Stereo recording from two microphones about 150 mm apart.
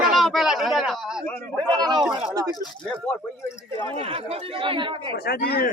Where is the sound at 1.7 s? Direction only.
25° right (ahead or behind).